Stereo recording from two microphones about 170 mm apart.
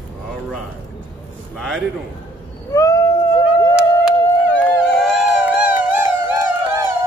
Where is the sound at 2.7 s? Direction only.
20° left (ahead or behind).